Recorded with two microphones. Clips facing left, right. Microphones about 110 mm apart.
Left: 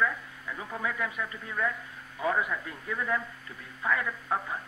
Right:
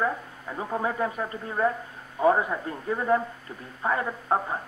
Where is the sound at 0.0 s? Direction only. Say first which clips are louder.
Right 2 dB; 40° right (ahead or behind).